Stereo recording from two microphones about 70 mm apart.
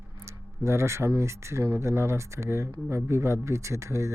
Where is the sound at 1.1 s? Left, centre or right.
Right.